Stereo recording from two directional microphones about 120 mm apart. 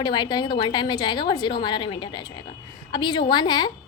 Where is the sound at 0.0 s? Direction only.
35° left (ahead or behind).